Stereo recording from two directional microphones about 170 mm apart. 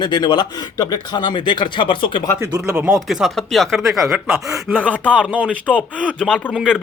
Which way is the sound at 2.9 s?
Centre (ahead or behind).